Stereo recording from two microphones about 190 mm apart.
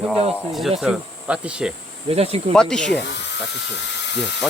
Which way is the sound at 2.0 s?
30° right (ahead or behind).